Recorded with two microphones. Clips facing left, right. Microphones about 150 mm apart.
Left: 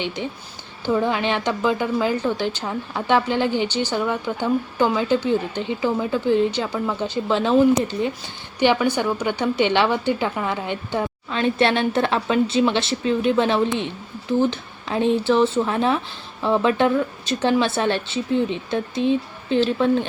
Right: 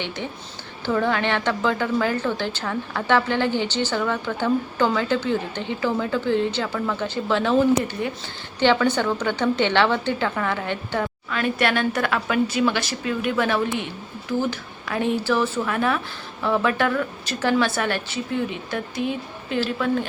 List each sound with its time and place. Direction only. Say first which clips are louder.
0.9 s a woman's voice: left 1 dB; 15° left (ahead or behind)